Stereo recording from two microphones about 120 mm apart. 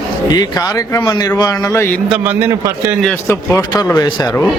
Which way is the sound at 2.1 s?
15° right (ahead or behind).